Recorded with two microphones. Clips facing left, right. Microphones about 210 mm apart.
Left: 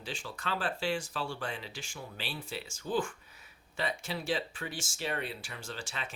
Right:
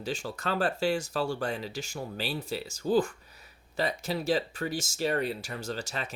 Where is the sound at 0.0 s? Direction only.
40° right (ahead or behind).